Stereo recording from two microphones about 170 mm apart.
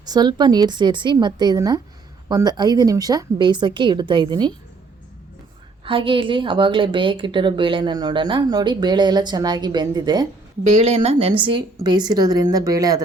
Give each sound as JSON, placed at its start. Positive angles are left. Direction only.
{"t": 0.0, "sound": "speech", "side_deg": -25}
{"t": 5.8, "sound": "speech", "side_deg": -30}
{"t": 10.6, "sound": "speech", "side_deg": -40}